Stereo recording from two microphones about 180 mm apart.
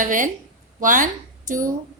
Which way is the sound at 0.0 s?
45° right (ahead or behind).